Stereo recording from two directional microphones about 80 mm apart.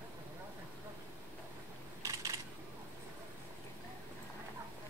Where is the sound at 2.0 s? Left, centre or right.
Right.